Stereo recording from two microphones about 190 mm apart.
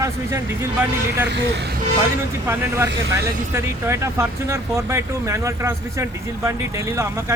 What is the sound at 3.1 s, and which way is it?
Speech, 15° right (ahead or behind).